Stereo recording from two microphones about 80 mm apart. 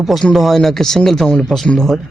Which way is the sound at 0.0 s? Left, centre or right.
Centre.